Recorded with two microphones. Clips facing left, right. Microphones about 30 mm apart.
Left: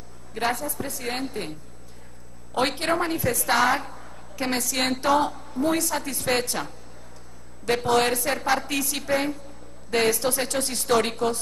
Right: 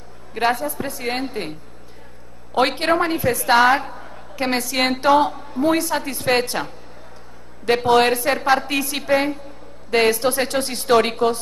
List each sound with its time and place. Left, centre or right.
0.3 s a woman's voice: right